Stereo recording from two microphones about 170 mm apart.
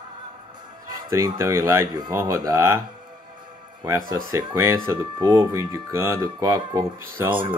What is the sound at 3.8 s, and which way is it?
Speech, 20° right (ahead or behind).